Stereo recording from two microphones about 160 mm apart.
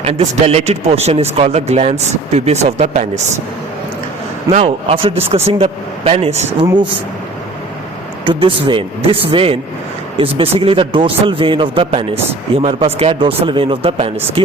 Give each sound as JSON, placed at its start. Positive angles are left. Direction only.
{"t": 0.0, "sound": "a man's voice", "side_deg": -40}
{"t": 4.5, "sound": "a man's voice", "side_deg": -35}
{"t": 8.2, "sound": "a man's voice", "side_deg": -30}